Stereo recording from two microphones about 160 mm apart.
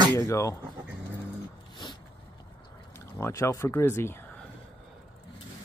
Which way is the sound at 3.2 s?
15° left (ahead or behind).